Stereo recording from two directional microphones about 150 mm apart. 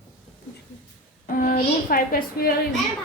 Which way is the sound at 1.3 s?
70° left (ahead or behind).